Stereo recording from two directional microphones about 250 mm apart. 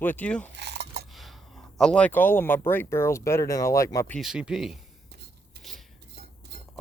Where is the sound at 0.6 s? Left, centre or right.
Right.